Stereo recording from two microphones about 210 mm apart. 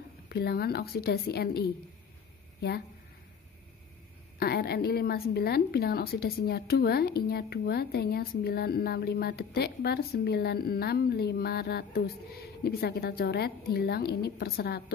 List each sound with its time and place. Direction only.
0.3 s a woman's voice: 50° left (ahead or behind)
4.4 s a woman's voice: 50° left (ahead or behind)